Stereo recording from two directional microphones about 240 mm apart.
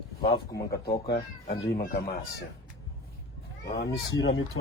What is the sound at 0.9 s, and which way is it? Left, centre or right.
Speech, left.